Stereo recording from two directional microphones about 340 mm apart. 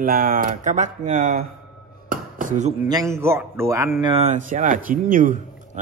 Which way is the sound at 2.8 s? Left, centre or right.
Centre.